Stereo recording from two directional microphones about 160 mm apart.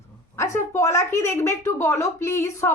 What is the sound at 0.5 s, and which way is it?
A woman's voice, 15° left (ahead or behind).